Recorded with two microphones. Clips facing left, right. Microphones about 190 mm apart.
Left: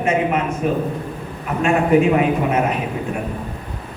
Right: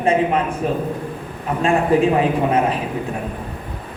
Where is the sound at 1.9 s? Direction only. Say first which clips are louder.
Left 2 dB; 30° right (ahead or behind).